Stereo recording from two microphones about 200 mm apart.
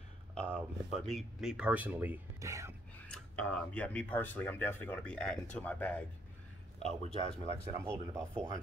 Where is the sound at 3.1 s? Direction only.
5° left (ahead or behind).